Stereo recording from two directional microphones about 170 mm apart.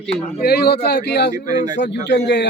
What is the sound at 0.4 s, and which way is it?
Speech, 70° left (ahead or behind).